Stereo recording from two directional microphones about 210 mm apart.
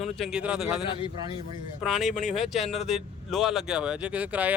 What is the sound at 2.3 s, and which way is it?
Speech, centre (ahead or behind).